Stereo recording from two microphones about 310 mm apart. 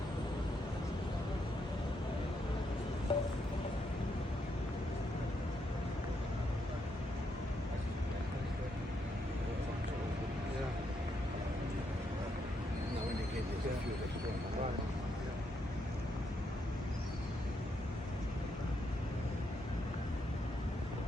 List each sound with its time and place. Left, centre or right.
3.1 s music: centre